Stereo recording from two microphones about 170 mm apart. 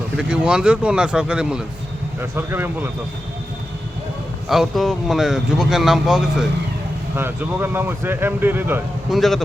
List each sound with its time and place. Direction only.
0.2 s speech: 5° right (ahead or behind)
4.4 s speech: centre (ahead or behind)
9.0 s speech: centre (ahead or behind)